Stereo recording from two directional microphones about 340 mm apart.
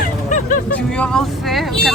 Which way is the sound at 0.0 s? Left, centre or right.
Left.